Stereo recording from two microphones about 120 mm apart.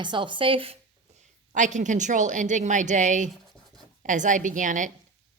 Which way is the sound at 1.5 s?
85° right.